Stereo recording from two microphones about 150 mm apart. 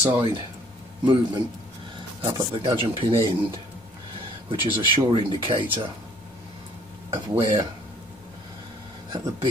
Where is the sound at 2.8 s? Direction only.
35° right (ahead or behind).